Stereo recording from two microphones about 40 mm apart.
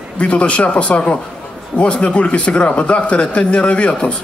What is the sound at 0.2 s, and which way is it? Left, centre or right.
A man's voice, left.